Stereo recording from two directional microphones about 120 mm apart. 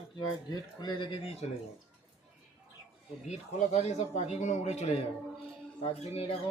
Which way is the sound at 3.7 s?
65° left (ahead or behind).